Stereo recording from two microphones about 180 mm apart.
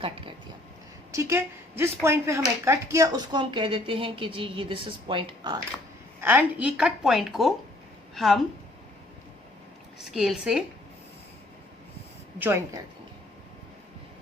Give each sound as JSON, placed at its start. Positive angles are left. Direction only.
{"t": 0.0, "sound": "a sound", "side_deg": -30}
{"t": 1.1, "sound": "speech", "side_deg": -15}
{"t": 6.1, "sound": "a woman's voice", "side_deg": -10}
{"t": 10.0, "sound": "a woman's voice", "side_deg": 0}
{"t": 12.4, "sound": "speech", "side_deg": -15}